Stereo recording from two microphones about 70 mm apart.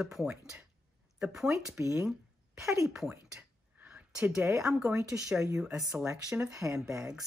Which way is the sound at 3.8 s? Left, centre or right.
Centre.